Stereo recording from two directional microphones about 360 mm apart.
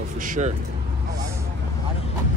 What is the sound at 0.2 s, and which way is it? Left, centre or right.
Speech, right.